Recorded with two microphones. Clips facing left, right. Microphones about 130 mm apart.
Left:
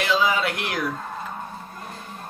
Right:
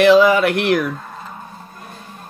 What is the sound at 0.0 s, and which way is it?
Speech, 65° right (ahead or behind).